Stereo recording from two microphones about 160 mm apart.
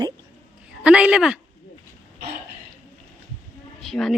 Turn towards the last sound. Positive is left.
turn(degrees=0)  # may be behind; listen again after turning